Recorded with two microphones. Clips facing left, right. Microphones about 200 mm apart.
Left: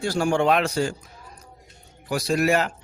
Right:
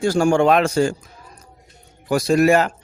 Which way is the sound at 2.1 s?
50° right (ahead or behind).